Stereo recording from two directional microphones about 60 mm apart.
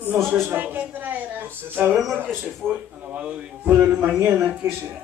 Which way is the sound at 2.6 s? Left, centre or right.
Right.